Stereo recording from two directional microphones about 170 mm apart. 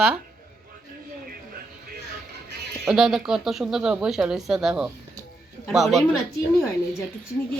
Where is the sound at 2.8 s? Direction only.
5° right (ahead or behind).